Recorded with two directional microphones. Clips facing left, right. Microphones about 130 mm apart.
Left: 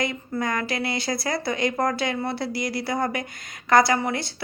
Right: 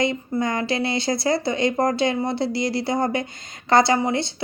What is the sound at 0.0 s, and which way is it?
A woman's voice, 25° right (ahead or behind).